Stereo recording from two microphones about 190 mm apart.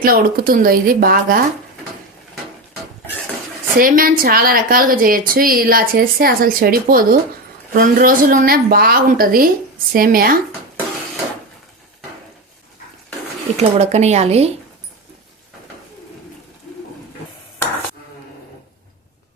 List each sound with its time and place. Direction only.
0.0 s a woman's voice: 50° right (ahead or behind)
3.8 s a woman's voice: 50° right (ahead or behind)
13.6 s speech: 35° right (ahead or behind)